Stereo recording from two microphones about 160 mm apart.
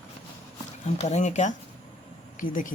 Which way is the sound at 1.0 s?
45° left (ahead or behind).